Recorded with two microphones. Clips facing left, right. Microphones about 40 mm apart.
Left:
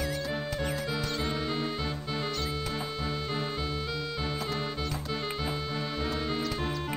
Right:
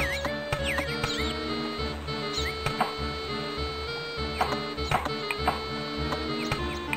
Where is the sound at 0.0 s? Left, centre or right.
Right.